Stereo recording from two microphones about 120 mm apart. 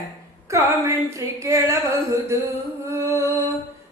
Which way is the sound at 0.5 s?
25° right (ahead or behind).